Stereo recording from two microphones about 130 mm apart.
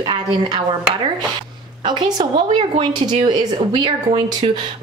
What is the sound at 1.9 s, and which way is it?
A woman's voice, 35° right (ahead or behind).